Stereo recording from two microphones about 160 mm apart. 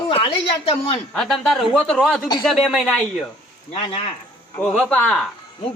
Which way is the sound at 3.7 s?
35° left (ahead or behind).